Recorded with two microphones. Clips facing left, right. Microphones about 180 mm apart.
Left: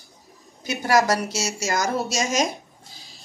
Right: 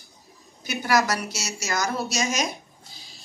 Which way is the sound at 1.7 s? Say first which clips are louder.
Left 2 dB; 50° left (ahead or behind).